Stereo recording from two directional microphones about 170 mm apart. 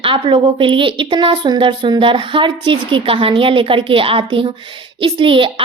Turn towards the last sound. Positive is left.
turn(degrees=-30)  # may be behind; listen again after turning